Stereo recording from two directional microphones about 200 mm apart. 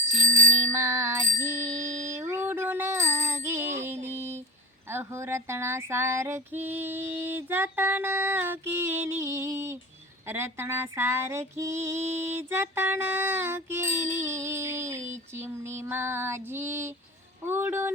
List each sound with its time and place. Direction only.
0.1 s bicycle bell: 40° right (ahead or behind)
0.7 s female singing: 15° right (ahead or behind)
2.1 s a sound: 10° right (ahead or behind)
4.9 s female singing: 10° right (ahead or behind)